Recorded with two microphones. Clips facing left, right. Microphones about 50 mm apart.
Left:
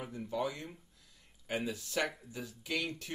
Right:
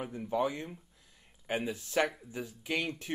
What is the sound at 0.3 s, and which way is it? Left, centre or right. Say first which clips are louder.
Speech: right 5 dB; right.